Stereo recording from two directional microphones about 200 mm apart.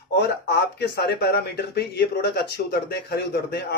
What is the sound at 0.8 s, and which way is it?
Speech, 55° left (ahead or behind).